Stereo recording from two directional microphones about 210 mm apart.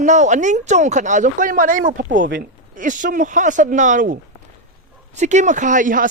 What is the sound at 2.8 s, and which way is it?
Speech, 40° right (ahead or behind).